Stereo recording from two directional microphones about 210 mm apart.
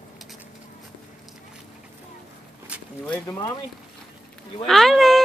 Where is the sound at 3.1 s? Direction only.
15° left (ahead or behind).